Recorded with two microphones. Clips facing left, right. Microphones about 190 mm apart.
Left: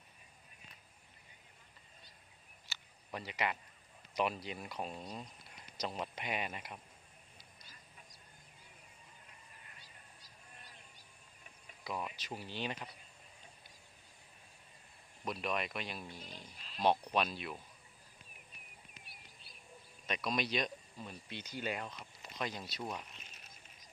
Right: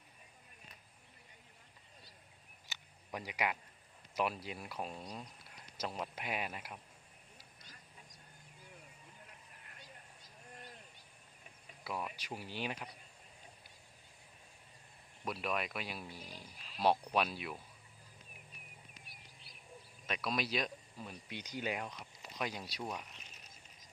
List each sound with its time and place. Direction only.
2.6 s a sound: 10° right (ahead or behind)
4.1 s speech: 5° right (ahead or behind)
11.8 s speech: 5° right (ahead or behind)
15.2 s speech: 5° right (ahead or behind)
20.1 s speech: 5° right (ahead or behind)